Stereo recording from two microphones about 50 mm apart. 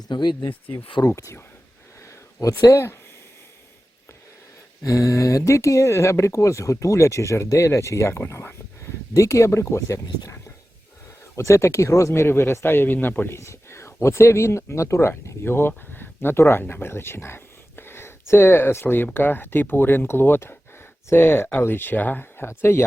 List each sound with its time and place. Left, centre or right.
1.0 s speech: left
2.0 s a sound: left
4.8 s speech: left
9.1 s speech: left
11.3 s speech: left
12.2 s speech: left
13.3 s speech: left
15.4 s speech: left
22.4 s speech: left